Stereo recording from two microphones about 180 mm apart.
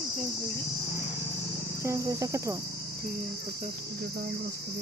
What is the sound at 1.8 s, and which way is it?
Speech, 15° right (ahead or behind).